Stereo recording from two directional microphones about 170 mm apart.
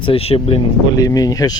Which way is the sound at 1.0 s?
20° left (ahead or behind).